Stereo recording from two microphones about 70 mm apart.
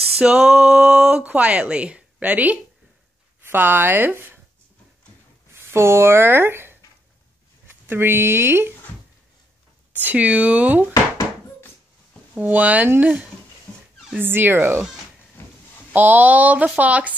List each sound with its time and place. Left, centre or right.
0.2 s speech: centre
5.5 s speech: right
9.9 s speech: right
12.4 s speech: right
14.1 s speech: right
15.9 s speech: right